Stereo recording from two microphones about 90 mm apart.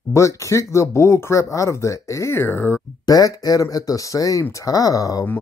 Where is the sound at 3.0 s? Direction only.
45° left (ahead or behind).